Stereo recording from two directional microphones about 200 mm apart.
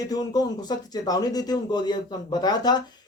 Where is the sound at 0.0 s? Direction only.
20° left (ahead or behind).